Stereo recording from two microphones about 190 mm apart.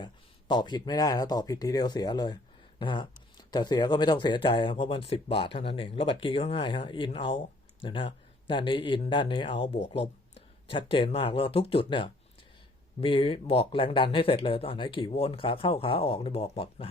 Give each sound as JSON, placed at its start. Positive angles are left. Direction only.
{"t": 0.0, "sound": "speech", "side_deg": 25}